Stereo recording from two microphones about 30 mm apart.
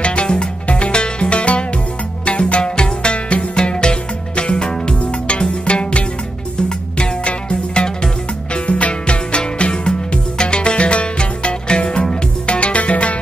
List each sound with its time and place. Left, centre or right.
0.0 s music: left
8.6 s music: left